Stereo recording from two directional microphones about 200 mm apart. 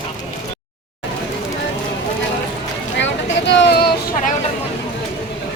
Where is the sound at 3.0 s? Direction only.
60° left (ahead or behind).